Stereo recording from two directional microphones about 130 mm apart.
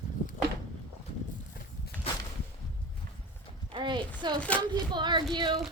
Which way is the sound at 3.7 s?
35° right (ahead or behind).